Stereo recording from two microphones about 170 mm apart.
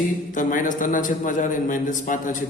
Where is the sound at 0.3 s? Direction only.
50° left (ahead or behind).